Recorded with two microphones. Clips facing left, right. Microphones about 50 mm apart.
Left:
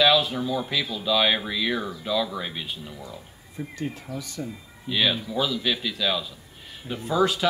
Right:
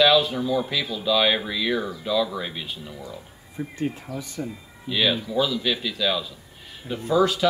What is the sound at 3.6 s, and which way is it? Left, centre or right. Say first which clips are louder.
Speech: right 3 dB; centre.